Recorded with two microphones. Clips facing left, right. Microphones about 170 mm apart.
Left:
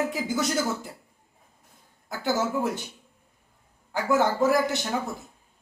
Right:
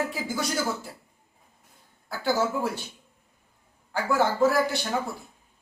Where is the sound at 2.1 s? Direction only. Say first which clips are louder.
Even; 20° left (ahead or behind).